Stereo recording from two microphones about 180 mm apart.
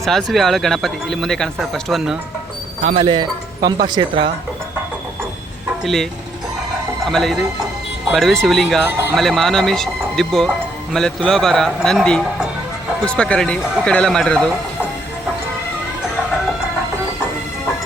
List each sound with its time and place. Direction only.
0.0 s speech: centre (ahead or behind)
2.9 s speech: 25° right (ahead or behind)
5.8 s speech: centre (ahead or behind)
7.1 s speech: centre (ahead or behind)